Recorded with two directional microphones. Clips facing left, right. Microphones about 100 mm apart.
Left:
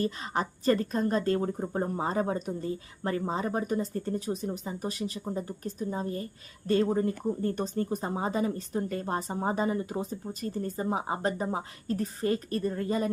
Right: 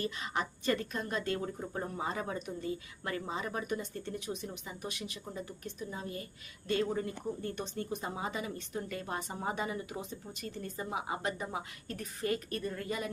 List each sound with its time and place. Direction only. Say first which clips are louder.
0.0 s speech: left 6 dB; 35° left (ahead or behind)